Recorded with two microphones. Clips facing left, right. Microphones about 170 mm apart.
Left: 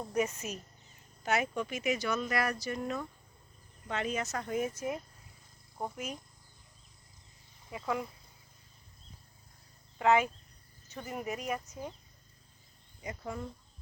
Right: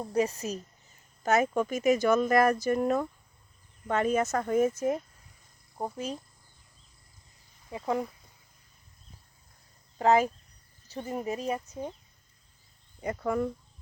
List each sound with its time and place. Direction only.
0.1 s speech: 35° right (ahead or behind)
5.7 s speech: 25° right (ahead or behind)
7.7 s speech: 30° right (ahead or behind)
10.0 s speech: 35° right (ahead or behind)
13.0 s speech: 60° right (ahead or behind)